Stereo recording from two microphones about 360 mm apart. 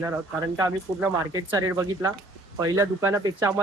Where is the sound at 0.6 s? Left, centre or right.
Centre.